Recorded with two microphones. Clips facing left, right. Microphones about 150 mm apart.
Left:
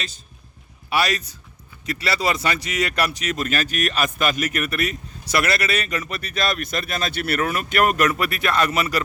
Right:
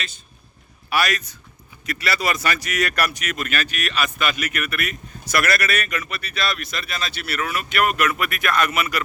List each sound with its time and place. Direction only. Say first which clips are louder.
0.9 s speech: left 1 dB; 30° left (ahead or behind)